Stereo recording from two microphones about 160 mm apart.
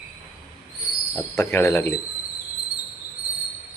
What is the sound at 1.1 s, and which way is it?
Speech, 15° left (ahead or behind).